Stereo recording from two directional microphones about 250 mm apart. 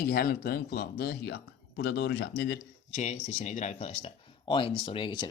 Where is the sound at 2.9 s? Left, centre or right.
Left.